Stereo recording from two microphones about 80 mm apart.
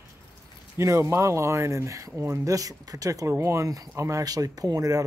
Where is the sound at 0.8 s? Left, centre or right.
Right.